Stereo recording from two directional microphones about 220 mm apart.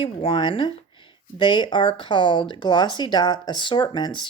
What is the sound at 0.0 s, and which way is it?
Speech, 25° left (ahead or behind).